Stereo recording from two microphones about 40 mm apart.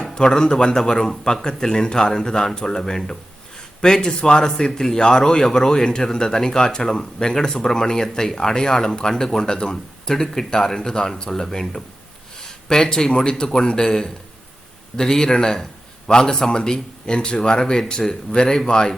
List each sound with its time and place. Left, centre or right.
0.1 s a man's voice: centre